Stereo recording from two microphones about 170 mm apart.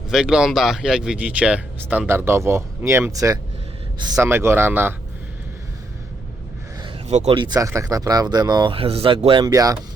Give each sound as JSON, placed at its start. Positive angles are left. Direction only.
{"t": 0.1, "sound": "speech", "side_deg": -5}
{"t": 7.1, "sound": "speech", "side_deg": -40}
{"t": 7.6, "sound": "speech", "side_deg": -20}